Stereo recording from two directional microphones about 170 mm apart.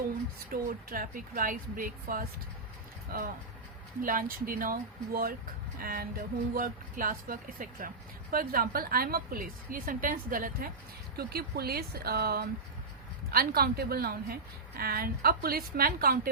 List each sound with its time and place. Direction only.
0.5 s a woman's voice: 55° right (ahead or behind)
11.2 s a woman's voice: 65° right (ahead or behind)